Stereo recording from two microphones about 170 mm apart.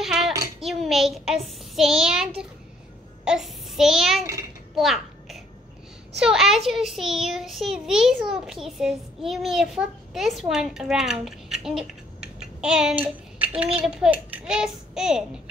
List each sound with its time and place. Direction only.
0.6 s a child's voice: centre (ahead or behind)
4.7 s a sound: centre (ahead or behind)
6.1 s a child's voice: 5° right (ahead or behind)